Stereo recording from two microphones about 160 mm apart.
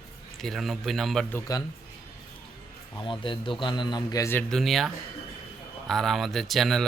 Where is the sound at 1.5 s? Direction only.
20° left (ahead or behind).